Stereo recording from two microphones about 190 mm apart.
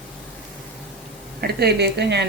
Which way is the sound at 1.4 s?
60° right (ahead or behind).